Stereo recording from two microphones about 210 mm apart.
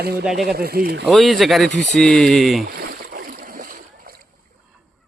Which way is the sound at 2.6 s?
45° right (ahead or behind).